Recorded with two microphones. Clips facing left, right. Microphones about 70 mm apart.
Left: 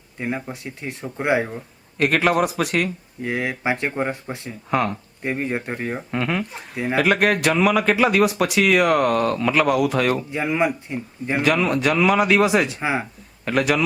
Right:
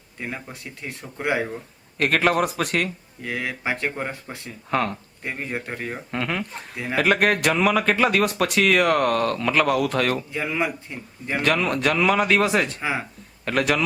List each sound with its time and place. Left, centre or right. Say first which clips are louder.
0.2 s speech: left 6 dB; centre
1.5 s speech: even; centre
3.2 s speech: left 4 dB; left
4.7 s speech: left 2 dB; centre
5.2 s speech: left 5 dB; centre
6.1 s speech: left 2 dB; centre
10.3 s speech: left 4 dB; centre
11.4 s speech: left 2 dB; centre
12.8 s speech: left 3 dB; centre
13.4 s a man's voice: left 2 dB; centre